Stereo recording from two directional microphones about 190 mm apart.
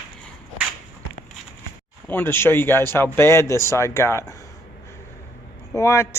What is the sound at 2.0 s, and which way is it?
Speech, 10° left (ahead or behind).